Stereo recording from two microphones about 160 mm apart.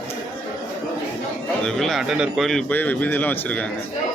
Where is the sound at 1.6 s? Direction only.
Centre (ahead or behind).